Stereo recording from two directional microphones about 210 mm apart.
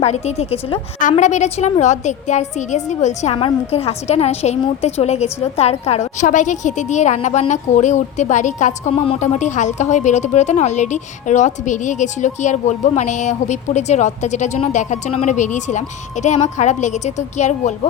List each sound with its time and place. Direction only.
0.0 s a woman's voice: 30° left (ahead or behind)